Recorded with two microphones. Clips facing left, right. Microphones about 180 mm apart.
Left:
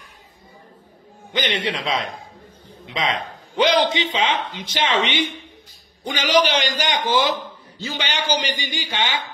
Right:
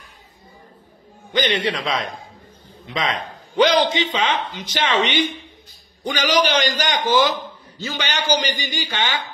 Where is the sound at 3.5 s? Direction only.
25° left (ahead or behind).